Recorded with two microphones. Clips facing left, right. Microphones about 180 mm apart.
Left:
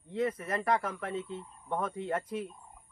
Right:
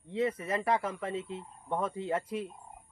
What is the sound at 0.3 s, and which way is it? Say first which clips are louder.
Speech: right 1 dB; 30° right (ahead or behind).